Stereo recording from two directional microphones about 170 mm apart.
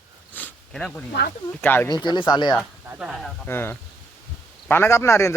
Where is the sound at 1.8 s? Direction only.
25° left (ahead or behind).